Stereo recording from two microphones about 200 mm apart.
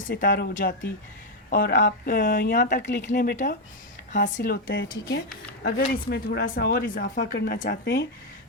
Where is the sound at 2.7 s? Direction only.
60° left (ahead or behind).